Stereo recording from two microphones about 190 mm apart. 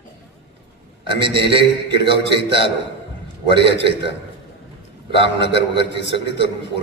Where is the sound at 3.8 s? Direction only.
25° right (ahead or behind).